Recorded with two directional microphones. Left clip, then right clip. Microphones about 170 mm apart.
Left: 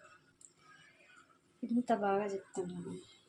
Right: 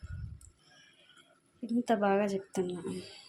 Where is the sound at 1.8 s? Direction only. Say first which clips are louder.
Right 5 dB; 30° right (ahead or behind).